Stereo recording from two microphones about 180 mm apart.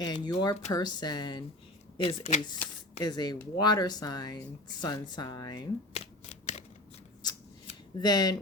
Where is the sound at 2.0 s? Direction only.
35° left (ahead or behind).